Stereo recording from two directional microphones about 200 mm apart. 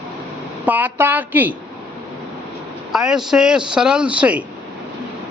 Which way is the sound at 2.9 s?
5° right (ahead or behind).